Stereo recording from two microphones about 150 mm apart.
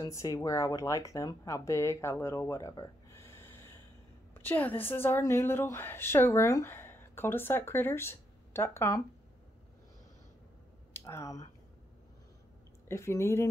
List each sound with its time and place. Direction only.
0.0 s a woman's voice: 20° left (ahead or behind)
10.9 s speech: 15° left (ahead or behind)
12.8 s speech: 20° left (ahead or behind)